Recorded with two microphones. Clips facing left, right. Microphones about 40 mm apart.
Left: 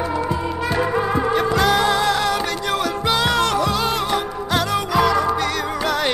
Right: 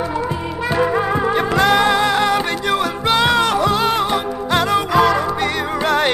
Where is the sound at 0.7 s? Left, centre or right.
Centre.